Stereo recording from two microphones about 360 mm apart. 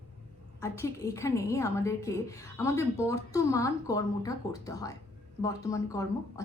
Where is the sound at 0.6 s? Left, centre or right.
Centre.